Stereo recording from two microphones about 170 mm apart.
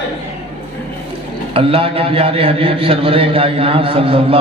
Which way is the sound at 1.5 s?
35° right (ahead or behind).